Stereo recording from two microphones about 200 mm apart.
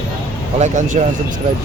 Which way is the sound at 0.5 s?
35° right (ahead or behind).